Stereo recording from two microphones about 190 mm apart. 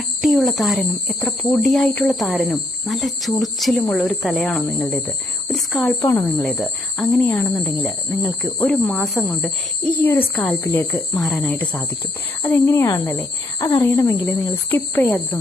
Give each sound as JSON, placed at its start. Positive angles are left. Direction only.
{"t": 0.2, "sound": "speech", "side_deg": 0}
{"t": 6.0, "sound": "speech", "side_deg": 15}
{"t": 6.4, "sound": "speech", "side_deg": 0}
{"t": 10.0, "sound": "speech", "side_deg": 10}